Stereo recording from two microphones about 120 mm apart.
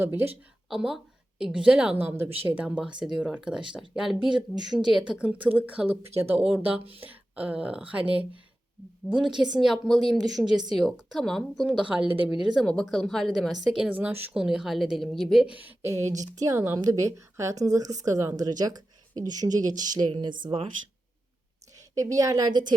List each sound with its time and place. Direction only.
0.0 s a woman's voice: 15° right (ahead or behind)
0.7 s a woman's voice: centre (ahead or behind)
6.8 s speech: 50° right (ahead or behind)
7.1 s speech: 10° right (ahead or behind)
9.0 s speech: 5° right (ahead or behind)
14.3 s speech: 5° right (ahead or behind)
15.4 s a woman's voice: 15° right (ahead or behind); by 20.7 s 45° right (ahead or behind)
21.8 s a woman's voice: 30° right (ahead or behind)